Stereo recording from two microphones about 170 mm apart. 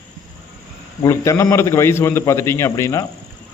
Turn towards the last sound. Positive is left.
turn(degrees=15)  # may be behind; listen again after turning